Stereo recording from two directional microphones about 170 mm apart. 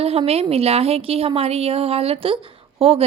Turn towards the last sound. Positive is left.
turn(degrees=-35)  # may be behind; listen again after turning